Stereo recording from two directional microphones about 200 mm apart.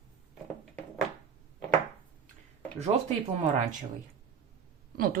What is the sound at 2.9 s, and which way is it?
Speech, 30° right (ahead or behind).